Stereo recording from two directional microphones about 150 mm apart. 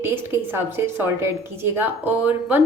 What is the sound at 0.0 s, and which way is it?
A woman's voice, 15° right (ahead or behind).